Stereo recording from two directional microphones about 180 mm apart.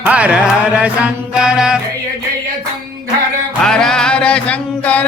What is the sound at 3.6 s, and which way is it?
Music, 5° left (ahead or behind).